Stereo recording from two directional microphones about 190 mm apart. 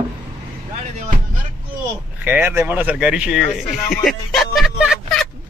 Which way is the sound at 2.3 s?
10° right (ahead or behind).